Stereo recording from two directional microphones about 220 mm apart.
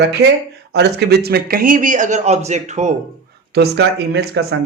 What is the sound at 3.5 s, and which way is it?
Speech, 45° right (ahead or behind).